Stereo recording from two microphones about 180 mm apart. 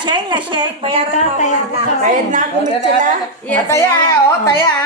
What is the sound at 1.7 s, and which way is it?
Speech, 40° right (ahead or behind).